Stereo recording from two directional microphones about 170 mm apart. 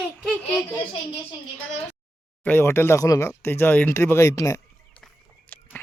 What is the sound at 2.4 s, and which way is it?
Speech, 10° left (ahead or behind).